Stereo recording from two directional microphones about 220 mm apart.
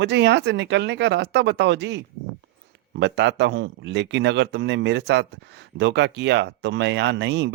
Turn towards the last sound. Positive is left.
turn(degrees=-50)  # may be behind; listen again after turning